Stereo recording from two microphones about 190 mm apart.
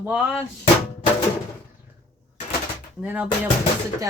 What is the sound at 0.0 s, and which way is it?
Speech, 10° right (ahead or behind).